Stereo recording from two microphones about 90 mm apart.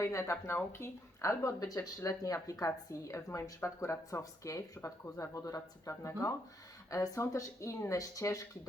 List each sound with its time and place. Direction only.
0.0 s a woman's voice: 35° left (ahead or behind)